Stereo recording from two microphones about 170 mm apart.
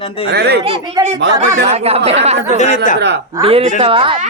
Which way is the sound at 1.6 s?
35° right (ahead or behind).